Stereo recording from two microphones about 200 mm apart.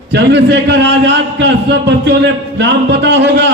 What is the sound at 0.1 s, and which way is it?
A man's voice, 60° right (ahead or behind).